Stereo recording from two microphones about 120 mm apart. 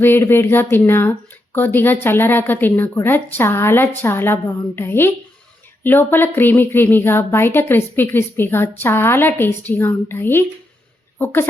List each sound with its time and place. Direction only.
0.0 s speech: 20° left (ahead or behind)